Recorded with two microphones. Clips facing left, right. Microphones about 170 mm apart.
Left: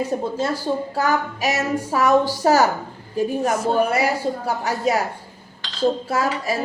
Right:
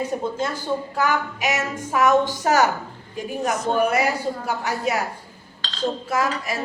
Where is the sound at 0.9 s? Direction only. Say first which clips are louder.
Left 2 dB; 40° left (ahead or behind).